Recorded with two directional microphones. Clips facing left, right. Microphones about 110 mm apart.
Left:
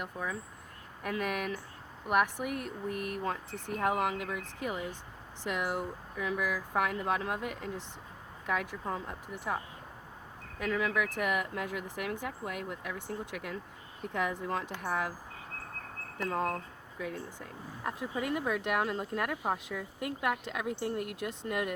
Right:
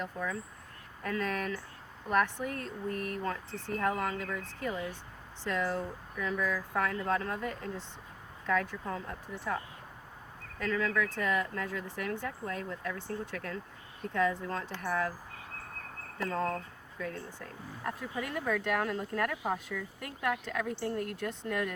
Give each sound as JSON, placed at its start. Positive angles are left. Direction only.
{"t": 0.0, "sound": "speech", "side_deg": 15}
{"t": 10.6, "sound": "speech", "side_deg": 15}
{"t": 16.3, "sound": "speech", "side_deg": 15}
{"t": 17.8, "sound": "speech", "side_deg": 15}